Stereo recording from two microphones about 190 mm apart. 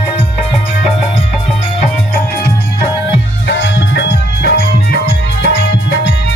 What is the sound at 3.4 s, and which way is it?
Music, 65° left (ahead or behind).